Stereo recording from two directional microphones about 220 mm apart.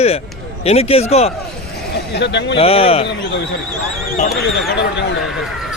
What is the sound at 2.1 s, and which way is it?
Speech, 50° left (ahead or behind).